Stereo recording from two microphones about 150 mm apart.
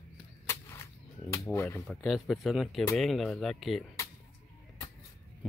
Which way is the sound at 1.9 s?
Centre (ahead or behind).